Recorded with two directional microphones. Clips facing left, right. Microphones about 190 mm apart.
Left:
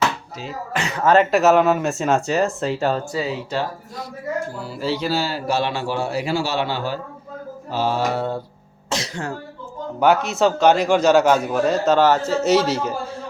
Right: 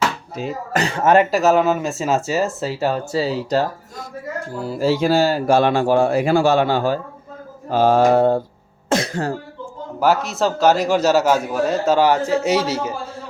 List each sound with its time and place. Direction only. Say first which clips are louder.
0.3 s speech: right 5 dB; 40° right (ahead or behind)
0.9 s speech: right 1 dB; 15° right (ahead or behind)
1.3 s a man's voice: left 1 dB; centre (ahead or behind)
3.1 s speech: right 5 dB; 35° right (ahead or behind); by 9.2 s 50° right (ahead or behind)
10.0 s a man's voice: left 1 dB; centre (ahead or behind)